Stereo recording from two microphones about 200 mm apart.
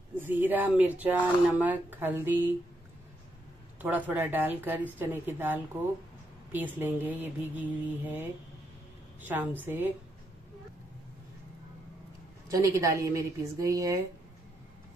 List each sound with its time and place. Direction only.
0.2 s speech: 10° right (ahead or behind)
3.8 s speech: 10° right (ahead or behind)
12.4 s speech: 15° right (ahead or behind)